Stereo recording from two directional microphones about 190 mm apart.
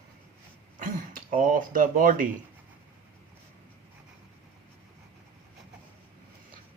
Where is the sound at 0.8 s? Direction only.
45° right (ahead or behind).